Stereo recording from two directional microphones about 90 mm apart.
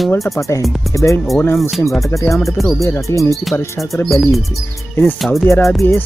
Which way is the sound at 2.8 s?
35° left (ahead or behind).